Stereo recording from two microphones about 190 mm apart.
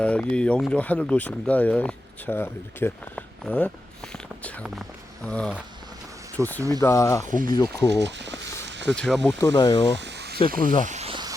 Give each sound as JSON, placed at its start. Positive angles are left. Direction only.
{"t": 0.0, "sound": "speech", "side_deg": 5}
{"t": 6.6, "sound": "speech", "side_deg": -20}
{"t": 6.8, "sound": "speech", "side_deg": 15}
{"t": 8.0, "sound": "speech", "side_deg": -65}
{"t": 8.6, "sound": "a sound", "side_deg": -65}
{"t": 9.0, "sound": "speech", "side_deg": 5}
{"t": 9.4, "sound": "speech", "side_deg": 20}
{"t": 10.0, "sound": "a sound", "side_deg": -65}
{"t": 10.8, "sound": "a sound", "side_deg": -35}